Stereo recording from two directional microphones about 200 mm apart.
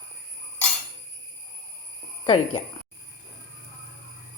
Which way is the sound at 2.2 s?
30° left (ahead or behind).